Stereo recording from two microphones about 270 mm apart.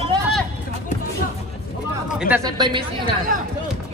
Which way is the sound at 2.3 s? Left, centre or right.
Centre.